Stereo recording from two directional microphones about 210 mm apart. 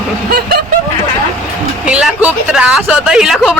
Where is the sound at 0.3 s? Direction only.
45° right (ahead or behind).